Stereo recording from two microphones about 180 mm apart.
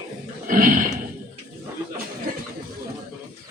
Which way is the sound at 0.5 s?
50° right (ahead or behind).